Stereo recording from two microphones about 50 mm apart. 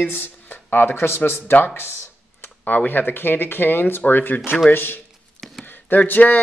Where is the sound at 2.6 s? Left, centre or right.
Left.